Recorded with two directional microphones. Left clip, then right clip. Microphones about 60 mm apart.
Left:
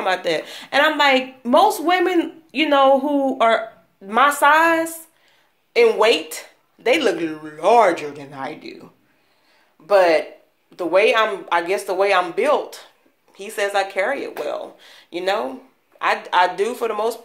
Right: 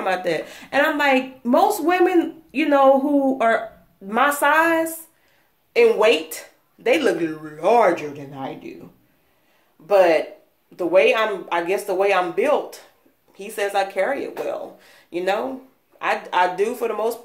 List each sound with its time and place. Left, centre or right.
0.0 s speech: right; by 8.7 s centre
9.8 s speech: right